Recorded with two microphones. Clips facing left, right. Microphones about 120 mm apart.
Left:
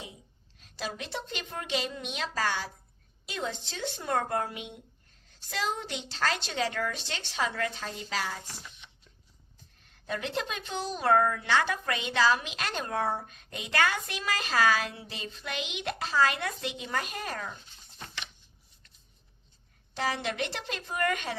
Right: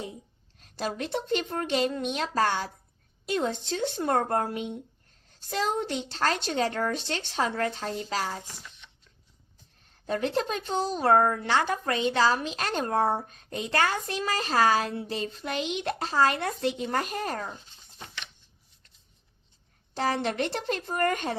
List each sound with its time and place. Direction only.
0.6 s a woman's voice: 45° right (ahead or behind)
10.1 s a woman's voice: 35° right (ahead or behind)
19.9 s a woman's voice: 45° right (ahead or behind)